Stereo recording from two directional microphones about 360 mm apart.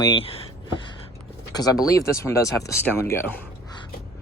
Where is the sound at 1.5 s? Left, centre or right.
Centre.